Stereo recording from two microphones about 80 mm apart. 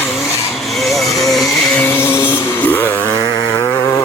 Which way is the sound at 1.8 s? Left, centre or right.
Left.